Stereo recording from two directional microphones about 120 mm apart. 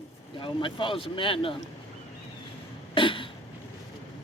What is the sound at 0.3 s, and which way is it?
Speech, 45° left (ahead or behind).